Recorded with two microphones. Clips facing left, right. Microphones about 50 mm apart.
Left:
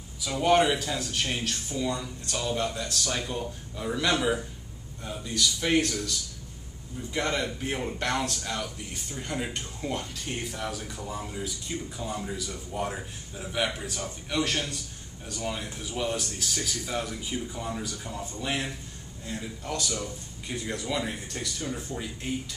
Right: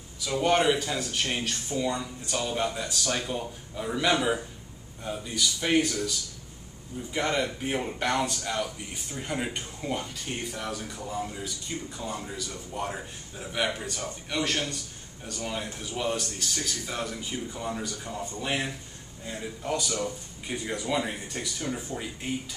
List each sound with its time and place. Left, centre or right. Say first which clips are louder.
0.2 s speech: left 1 dB; centre
1.3 s speech: right 1 dB; centre
7.2 s speech: right 1 dB; centre